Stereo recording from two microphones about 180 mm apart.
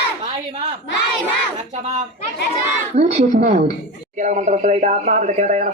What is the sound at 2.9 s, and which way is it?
Speech, 35° right (ahead or behind).